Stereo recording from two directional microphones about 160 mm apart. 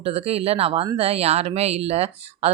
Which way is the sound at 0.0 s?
40° right (ahead or behind).